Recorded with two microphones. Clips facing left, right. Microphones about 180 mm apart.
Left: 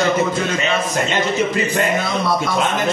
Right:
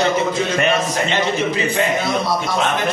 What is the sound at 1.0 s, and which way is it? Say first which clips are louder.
A man's voice: even; 50° left (ahead or behind).